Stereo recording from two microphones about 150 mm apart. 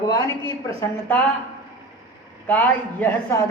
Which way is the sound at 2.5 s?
10° left (ahead or behind).